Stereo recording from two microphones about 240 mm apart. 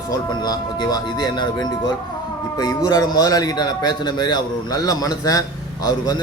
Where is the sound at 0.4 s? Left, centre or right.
Centre.